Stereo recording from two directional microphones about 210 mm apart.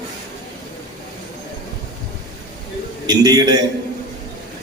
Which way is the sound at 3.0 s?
20° right (ahead or behind).